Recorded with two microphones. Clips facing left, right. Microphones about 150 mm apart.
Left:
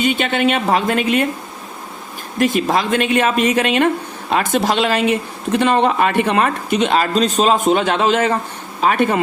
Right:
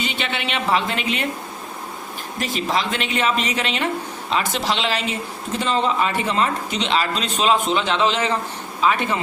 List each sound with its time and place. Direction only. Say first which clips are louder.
0.0 s speech: left 10 dB; 50° left (ahead or behind)
2.4 s speech: left 7 dB; 55° left (ahead or behind)